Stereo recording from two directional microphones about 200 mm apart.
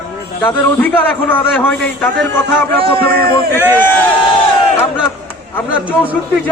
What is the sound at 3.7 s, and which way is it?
Speech, 10° left (ahead or behind).